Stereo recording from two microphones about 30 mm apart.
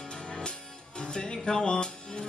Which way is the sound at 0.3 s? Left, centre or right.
Left.